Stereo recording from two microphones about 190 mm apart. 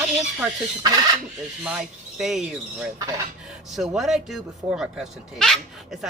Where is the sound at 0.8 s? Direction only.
20° right (ahead or behind).